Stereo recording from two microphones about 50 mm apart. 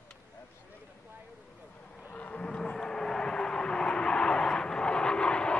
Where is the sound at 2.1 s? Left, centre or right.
Left.